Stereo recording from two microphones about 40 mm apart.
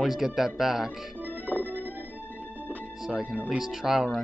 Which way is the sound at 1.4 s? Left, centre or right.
Right.